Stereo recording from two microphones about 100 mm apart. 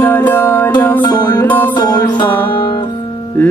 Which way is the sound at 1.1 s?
40° left (ahead or behind).